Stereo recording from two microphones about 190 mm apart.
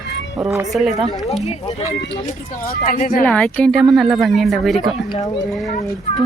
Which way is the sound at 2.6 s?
50° left (ahead or behind).